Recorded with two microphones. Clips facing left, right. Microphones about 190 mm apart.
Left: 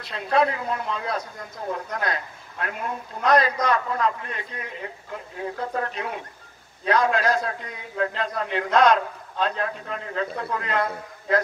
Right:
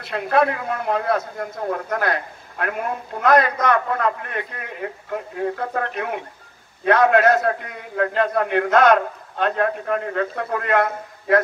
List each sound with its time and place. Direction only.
0.0 s speech: 60° right (ahead or behind)